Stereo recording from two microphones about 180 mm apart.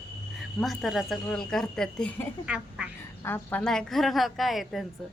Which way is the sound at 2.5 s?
5° right (ahead or behind).